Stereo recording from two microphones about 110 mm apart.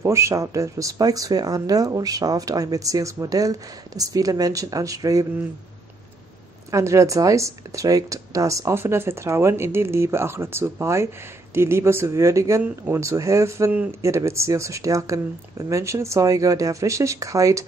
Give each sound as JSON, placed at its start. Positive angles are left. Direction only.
{"t": 0.0, "sound": "speech", "side_deg": -25}
{"t": 6.7, "sound": "speech", "side_deg": -25}